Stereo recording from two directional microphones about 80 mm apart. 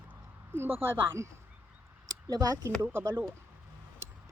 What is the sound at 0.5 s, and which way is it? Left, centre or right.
Speech, right.